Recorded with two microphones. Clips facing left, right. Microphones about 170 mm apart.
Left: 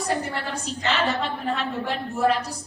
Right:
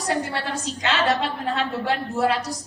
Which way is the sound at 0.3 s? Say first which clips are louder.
Right 2 dB; 90° right.